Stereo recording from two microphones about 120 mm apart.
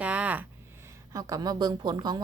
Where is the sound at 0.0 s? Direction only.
10° right (ahead or behind).